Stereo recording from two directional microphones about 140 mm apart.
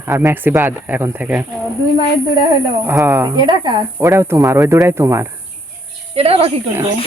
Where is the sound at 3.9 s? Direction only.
20° right (ahead or behind).